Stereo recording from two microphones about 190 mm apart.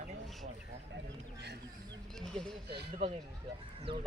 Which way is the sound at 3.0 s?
30° right (ahead or behind).